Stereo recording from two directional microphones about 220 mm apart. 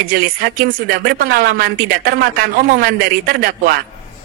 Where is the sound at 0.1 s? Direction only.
40° right (ahead or behind).